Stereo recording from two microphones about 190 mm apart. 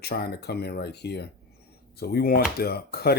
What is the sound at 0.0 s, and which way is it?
Speech, 55° left (ahead or behind).